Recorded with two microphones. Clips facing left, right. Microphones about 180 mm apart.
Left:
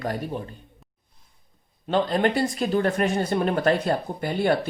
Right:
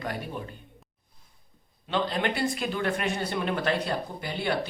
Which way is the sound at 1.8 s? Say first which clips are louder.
Left 6 dB; 45° left (ahead or behind).